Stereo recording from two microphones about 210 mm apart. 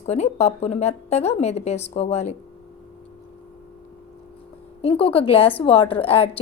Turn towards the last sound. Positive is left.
turn(degrees=25)  # may be behind; listen again after turning